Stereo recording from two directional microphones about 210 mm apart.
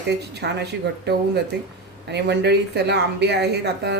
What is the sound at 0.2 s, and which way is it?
Speech, 50° right (ahead or behind).